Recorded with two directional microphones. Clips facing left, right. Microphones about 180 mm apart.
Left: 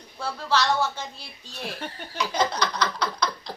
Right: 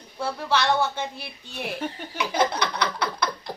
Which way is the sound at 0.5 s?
60° right (ahead or behind).